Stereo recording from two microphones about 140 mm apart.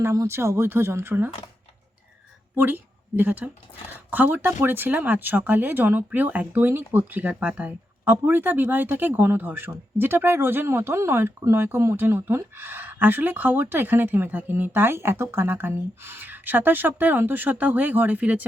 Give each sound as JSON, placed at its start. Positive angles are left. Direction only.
{"t": 0.0, "sound": "speech", "side_deg": -20}
{"t": 2.6, "sound": "speech", "side_deg": -15}